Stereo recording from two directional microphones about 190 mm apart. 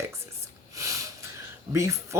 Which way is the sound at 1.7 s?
15° right (ahead or behind).